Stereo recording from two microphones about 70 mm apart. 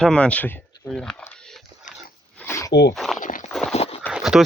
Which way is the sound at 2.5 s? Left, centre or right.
Left.